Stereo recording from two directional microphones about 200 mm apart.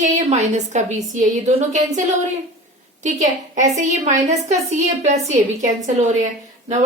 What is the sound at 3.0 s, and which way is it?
A woman's voice, 35° right (ahead or behind).